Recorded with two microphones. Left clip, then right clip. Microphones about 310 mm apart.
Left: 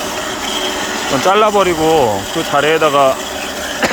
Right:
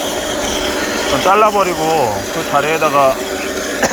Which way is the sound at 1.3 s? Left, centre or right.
Left.